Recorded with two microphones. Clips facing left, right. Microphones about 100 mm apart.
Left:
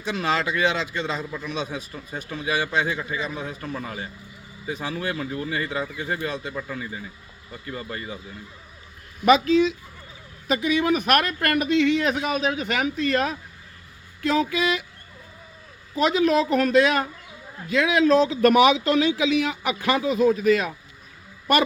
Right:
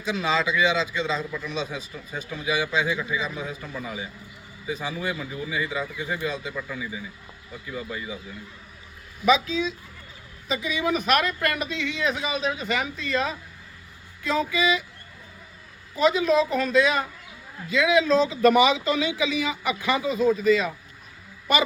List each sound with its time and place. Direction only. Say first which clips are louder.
0.0 s a man's voice: even; 60° left (ahead or behind)
9.2 s a man's voice: left 5 dB; 60° left (ahead or behind)
16.0 s a man's voice: even; 60° left (ahead or behind)